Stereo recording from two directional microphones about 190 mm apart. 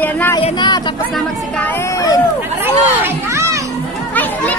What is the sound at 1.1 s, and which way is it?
Speech, 10° left (ahead or behind).